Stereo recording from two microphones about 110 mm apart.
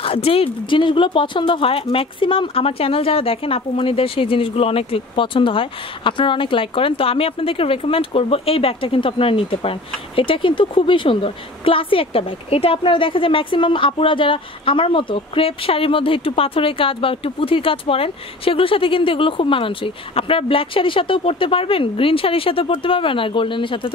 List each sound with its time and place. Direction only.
0.0 s speech: 60° left (ahead or behind)